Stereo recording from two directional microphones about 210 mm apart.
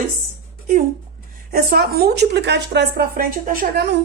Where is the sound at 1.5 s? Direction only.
45° right (ahead or behind).